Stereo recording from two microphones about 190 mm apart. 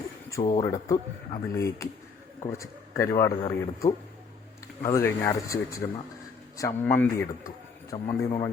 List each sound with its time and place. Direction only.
0.5 s a man's voice: 20° left (ahead or behind)